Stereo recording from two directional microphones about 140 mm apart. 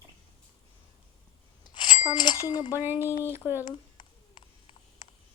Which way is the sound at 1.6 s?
30° left (ahead or behind).